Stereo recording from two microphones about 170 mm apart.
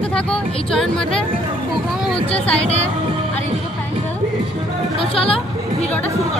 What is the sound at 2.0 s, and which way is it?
Speech, 5° left (ahead or behind).